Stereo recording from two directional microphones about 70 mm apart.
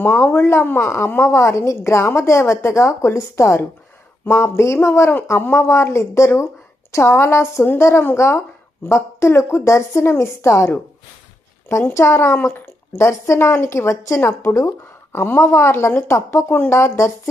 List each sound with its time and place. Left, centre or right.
0.0 s a woman's voice: left
16.1 s speech: left
16.5 s a woman's voice: left